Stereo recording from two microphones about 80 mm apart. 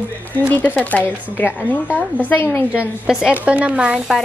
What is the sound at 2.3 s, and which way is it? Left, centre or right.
Speech, left.